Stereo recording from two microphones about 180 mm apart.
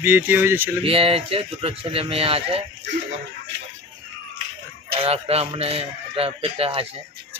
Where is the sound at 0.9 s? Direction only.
30° right (ahead or behind).